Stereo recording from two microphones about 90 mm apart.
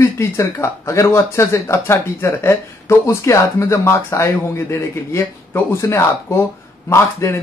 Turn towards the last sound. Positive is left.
turn(degrees=30)  # may be behind; listen again after turning